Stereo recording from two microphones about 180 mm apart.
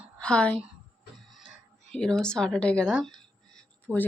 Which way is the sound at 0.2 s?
5° left (ahead or behind).